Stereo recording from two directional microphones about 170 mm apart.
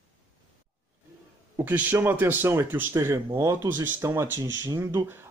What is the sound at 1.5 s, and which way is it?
Speech, 10° right (ahead or behind).